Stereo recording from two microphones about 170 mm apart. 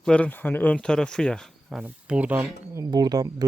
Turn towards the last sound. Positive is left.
turn(degrees=-25)  # may be behind; listen again after turning